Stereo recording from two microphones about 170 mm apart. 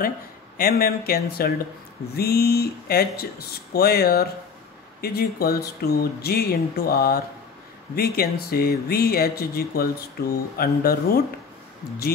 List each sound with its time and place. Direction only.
0.6 s speech: 60° left (ahead or behind)